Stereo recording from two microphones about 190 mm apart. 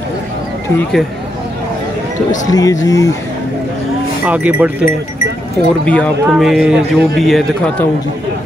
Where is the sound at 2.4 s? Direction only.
20° left (ahead or behind).